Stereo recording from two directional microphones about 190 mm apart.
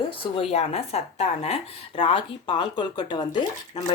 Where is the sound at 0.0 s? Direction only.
30° left (ahead or behind).